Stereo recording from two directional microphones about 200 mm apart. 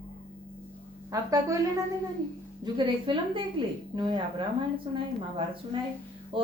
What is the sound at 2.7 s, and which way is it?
A woman's voice, 25° right (ahead or behind).